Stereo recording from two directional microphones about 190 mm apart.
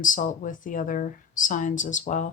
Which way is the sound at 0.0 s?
45° left (ahead or behind).